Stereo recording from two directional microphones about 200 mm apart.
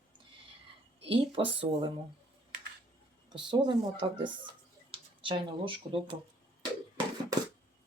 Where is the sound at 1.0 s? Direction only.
30° right (ahead or behind).